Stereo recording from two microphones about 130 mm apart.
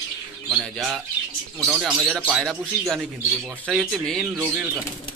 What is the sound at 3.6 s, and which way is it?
Speech, centre (ahead or behind).